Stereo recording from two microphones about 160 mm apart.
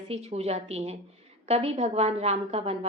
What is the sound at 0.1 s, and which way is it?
Speech, 40° right (ahead or behind).